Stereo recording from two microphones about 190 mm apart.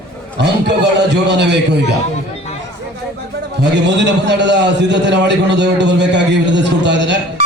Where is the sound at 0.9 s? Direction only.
65° right (ahead or behind).